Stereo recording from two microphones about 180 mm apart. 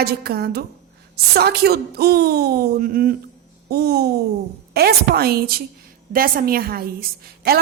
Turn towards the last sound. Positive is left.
turn(degrees=-60)  # may be behind; listen again after turning